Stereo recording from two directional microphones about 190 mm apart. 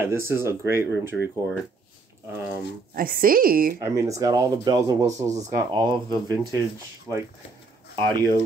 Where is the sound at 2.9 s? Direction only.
50° right (ahead or behind).